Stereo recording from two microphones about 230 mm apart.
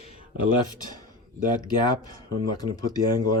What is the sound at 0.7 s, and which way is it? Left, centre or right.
Speech, centre.